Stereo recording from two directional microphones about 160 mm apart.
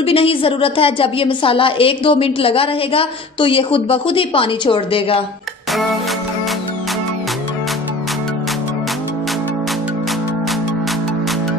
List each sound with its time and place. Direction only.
0.0 s a woman's voice: 35° left (ahead or behind)